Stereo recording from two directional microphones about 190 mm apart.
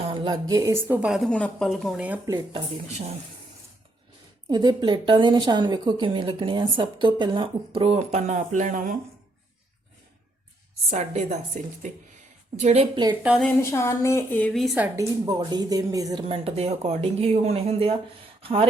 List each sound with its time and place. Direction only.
0.1 s a woman's voice: 25° right (ahead or behind); by 2.3 s 10° right (ahead or behind)
4.4 s a woman's voice: 20° right (ahead or behind); by 9.0 s 45° right (ahead or behind)
10.9 s speech: 35° right (ahead or behind)
13.4 s a woman's voice: 15° left (ahead or behind)
14.9 s a woman's voice: 20° right (ahead or behind)
16.2 s speech: 30° right (ahead or behind)